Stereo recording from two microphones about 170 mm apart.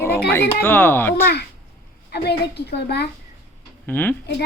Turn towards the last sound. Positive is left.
turn(degrees=10)  # may be behind; listen again after turning